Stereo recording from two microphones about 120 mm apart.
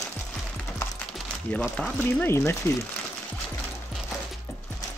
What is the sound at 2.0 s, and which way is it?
Speech, 20° left (ahead or behind).